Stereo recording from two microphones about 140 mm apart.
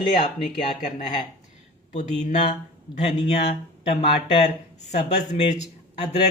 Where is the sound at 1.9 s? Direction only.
60° left (ahead or behind).